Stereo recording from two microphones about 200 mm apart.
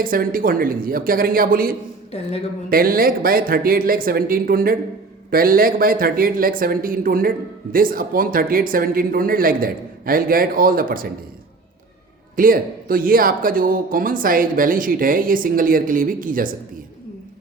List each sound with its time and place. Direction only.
0.0 s speech: 45° right (ahead or behind)
12.4 s speech: 45° right (ahead or behind)